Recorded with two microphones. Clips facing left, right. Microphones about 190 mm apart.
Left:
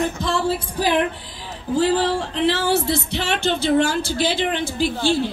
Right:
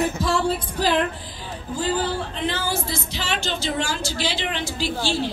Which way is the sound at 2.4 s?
75° left (ahead or behind).